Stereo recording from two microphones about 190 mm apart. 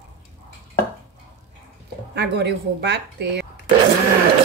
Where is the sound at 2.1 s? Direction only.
65° right (ahead or behind).